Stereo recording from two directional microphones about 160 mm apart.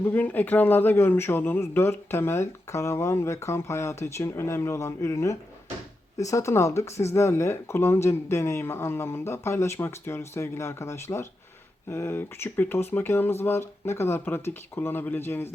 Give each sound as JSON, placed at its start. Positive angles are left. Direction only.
{"t": 0.0, "sound": "speech", "side_deg": 10}